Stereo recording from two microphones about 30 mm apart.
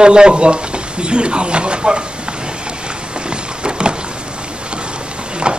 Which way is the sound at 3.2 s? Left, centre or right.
Right.